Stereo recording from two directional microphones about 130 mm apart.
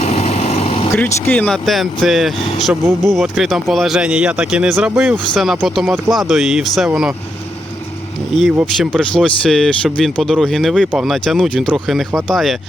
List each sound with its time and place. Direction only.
0.0 s vehicle: 55° left (ahead or behind)
0.9 s speech: 15° left (ahead or behind); by 7.1 s 5° right (ahead or behind)
8.6 s speech: 5° left (ahead or behind)